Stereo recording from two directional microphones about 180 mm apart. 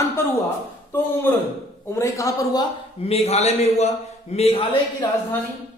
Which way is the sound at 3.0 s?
35° left (ahead or behind).